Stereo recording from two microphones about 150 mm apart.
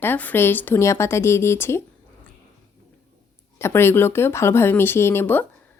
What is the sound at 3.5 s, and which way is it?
A woman's voice, 15° left (ahead or behind).